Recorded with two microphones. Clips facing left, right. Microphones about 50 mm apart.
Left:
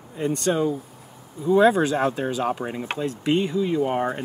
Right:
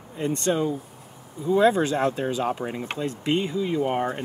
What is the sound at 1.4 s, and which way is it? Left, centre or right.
Speech, centre.